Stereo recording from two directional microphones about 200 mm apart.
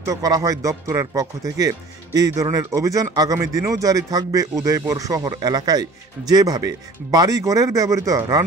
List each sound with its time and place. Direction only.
0.0 s speech: 15° right (ahead or behind)